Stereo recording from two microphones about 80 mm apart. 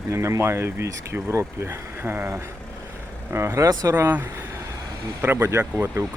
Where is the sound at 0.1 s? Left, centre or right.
Right.